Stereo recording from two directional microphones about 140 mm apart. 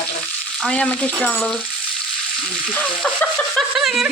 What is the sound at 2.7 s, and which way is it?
Frying, 10° left (ahead or behind).